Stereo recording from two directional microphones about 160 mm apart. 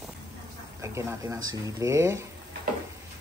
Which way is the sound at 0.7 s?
15° right (ahead or behind).